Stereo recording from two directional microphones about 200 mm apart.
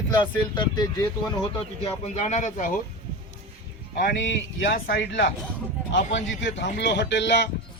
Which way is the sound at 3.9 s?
55° left (ahead or behind).